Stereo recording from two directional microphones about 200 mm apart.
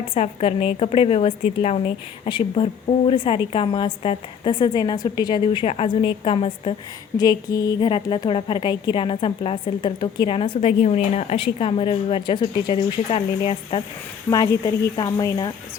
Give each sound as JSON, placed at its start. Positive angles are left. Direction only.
{"t": 0.1, "sound": "a woman's voice", "side_deg": 30}